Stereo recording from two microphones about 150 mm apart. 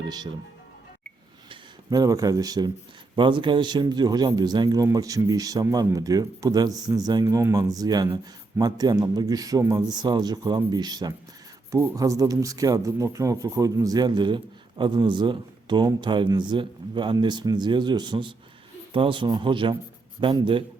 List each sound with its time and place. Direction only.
1.5 s speech: 25° right (ahead or behind)